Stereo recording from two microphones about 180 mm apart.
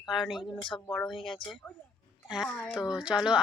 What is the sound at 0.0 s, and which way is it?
Speech, centre (ahead or behind).